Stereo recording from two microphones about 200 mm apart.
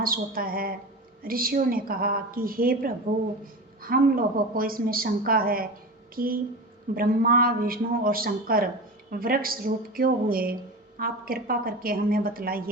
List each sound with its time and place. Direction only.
0.0 s a woman's voice: 45° right (ahead or behind)